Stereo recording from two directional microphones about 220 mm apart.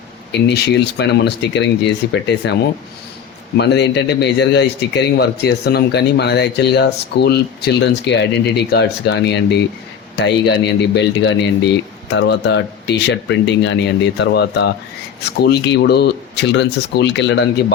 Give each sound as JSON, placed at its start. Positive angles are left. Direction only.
{"t": 0.3, "sound": "speech", "side_deg": 50}
{"t": 3.6, "sound": "speech", "side_deg": 50}